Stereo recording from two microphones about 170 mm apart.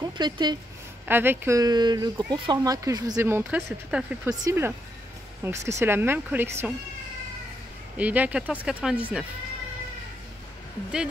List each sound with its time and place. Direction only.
0.0 s speech: 25° right (ahead or behind)
1.0 s speech: 10° right (ahead or behind)
8.0 s speech: 10° right (ahead or behind)